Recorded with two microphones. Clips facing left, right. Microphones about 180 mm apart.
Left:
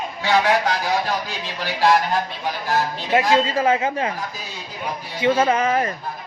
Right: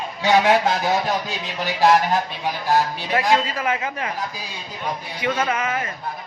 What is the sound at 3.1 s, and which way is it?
Speech, 30° left (ahead or behind).